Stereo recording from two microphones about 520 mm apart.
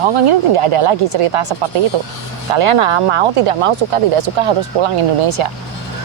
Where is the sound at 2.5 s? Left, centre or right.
Right.